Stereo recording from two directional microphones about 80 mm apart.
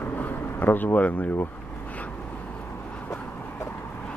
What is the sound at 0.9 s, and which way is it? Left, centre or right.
Speech, centre.